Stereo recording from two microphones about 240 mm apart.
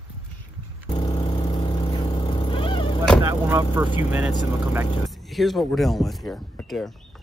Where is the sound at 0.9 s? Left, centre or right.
Centre.